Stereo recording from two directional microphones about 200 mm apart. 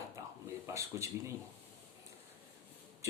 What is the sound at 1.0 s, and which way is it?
Speech, 15° right (ahead or behind).